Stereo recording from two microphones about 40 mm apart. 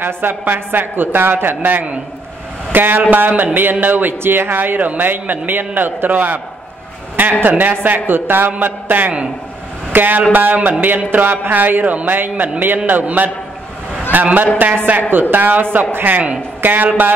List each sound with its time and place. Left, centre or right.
0.0 s a woman's voice: right
4.2 s a man's voice: right
7.4 s a man's voice: right
12.2 s a man's voice: right